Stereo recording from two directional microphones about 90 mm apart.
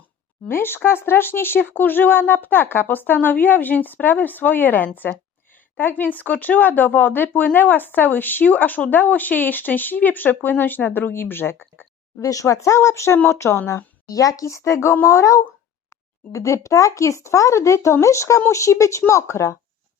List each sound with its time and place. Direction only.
0.4 s speech: 25° left (ahead or behind)
12.2 s a woman's voice: 40° left (ahead or behind)